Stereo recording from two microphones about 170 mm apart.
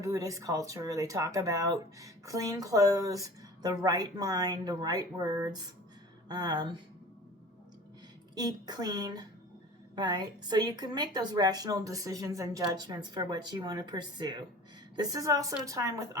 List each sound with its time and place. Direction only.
0.0 s a woman's voice: 20° right (ahead or behind)
8.4 s a woman's voice: 25° right (ahead or behind)